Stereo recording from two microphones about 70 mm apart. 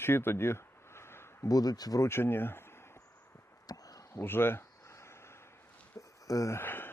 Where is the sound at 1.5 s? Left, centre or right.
Left.